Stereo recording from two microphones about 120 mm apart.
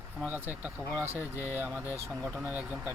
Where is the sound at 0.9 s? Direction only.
20° right (ahead or behind).